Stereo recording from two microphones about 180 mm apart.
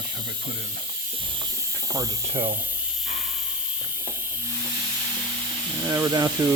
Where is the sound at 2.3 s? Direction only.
50° right (ahead or behind).